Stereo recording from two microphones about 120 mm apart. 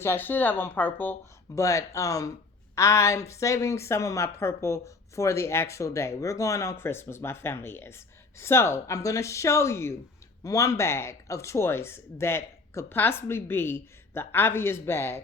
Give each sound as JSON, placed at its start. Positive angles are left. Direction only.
{"t": 0.0, "sound": "speech", "side_deg": 20}
{"t": 1.5, "sound": "speech", "side_deg": 25}